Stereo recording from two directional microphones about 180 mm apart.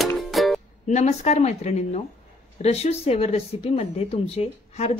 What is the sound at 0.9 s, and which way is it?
Speech, 40° left (ahead or behind).